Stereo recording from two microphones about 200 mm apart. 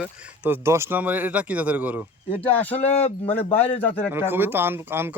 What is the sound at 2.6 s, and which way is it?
Speech, 30° left (ahead or behind).